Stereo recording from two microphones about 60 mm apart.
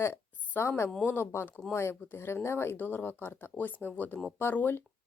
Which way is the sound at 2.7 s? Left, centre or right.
Left.